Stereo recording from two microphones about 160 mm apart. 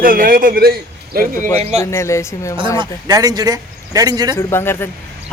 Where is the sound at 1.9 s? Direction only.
15° left (ahead or behind).